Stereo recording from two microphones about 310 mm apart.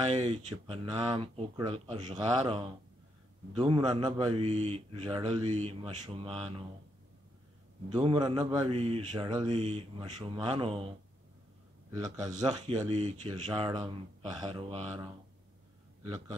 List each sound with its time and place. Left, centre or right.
0.1 s speech: centre
7.9 s speech: centre
11.9 s speech: centre